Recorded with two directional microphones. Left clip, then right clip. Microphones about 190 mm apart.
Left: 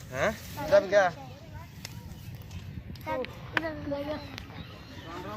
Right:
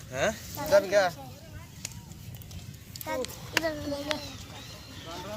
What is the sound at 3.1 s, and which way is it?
Speech, 30° right (ahead or behind).